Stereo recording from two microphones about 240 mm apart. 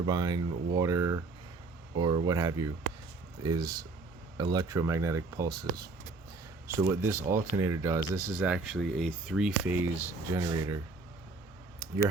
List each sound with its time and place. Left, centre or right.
0.0 s speech: centre
6.7 s speech: centre